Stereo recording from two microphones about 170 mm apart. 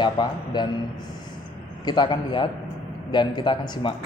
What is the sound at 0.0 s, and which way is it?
Speech, 25° left (ahead or behind).